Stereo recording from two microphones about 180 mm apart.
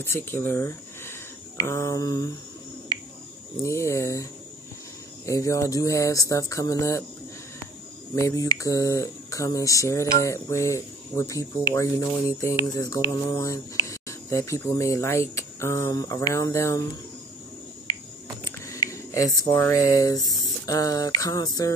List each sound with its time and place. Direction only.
0.0 s speech: 15° left (ahead or behind)
1.6 s a sound: 15° left (ahead or behind)
3.6 s speech: 15° left (ahead or behind)
8.1 s speech: 15° left (ahead or behind)
18.4 s speech: 15° left (ahead or behind)